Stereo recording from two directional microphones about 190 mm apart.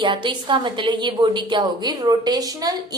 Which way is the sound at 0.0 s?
25° right (ahead or behind).